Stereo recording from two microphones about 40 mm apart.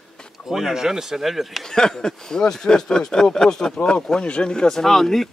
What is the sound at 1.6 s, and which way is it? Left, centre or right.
Speech, centre.